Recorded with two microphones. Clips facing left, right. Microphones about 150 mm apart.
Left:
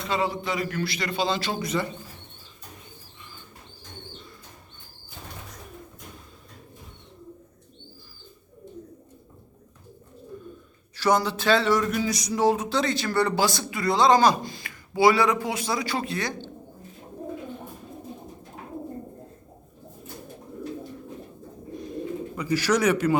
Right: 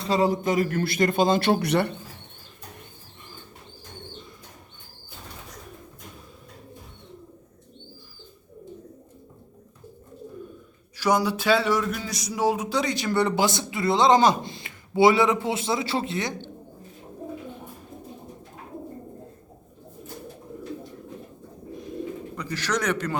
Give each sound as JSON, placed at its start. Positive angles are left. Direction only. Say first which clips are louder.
{"t": 0.0, "sound": "a man's voice", "louder": "right 5 dB", "side_deg": -35}
{"t": 10.9, "sound": "a man's voice", "louder": "even", "side_deg": -10}
{"t": 22.4, "sound": "a man's voice", "louder": "left 5 dB", "side_deg": 10}